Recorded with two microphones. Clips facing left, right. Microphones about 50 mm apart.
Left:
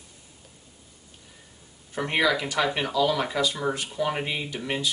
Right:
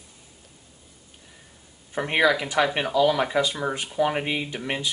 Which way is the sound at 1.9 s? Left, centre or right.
Centre.